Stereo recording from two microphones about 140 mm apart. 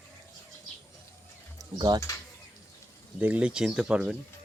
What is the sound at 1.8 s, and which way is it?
Speech, 30° right (ahead or behind).